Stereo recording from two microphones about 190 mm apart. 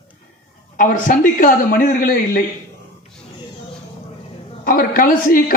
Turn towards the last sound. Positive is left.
turn(degrees=45)  # may be behind; listen again after turning